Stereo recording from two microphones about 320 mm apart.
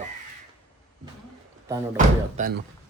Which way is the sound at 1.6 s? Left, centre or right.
Centre.